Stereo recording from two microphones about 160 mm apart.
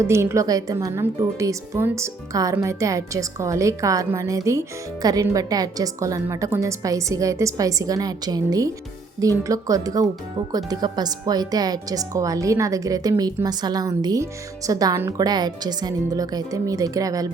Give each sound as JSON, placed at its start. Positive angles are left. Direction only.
{"t": 0.0, "sound": "a woman's voice", "side_deg": -15}